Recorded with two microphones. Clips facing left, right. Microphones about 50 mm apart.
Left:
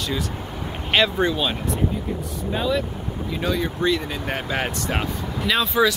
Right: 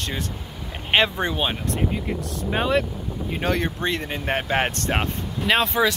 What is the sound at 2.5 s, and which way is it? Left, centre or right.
Speech, right.